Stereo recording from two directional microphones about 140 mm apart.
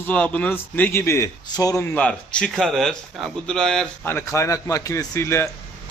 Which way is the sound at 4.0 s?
15° left (ahead or behind).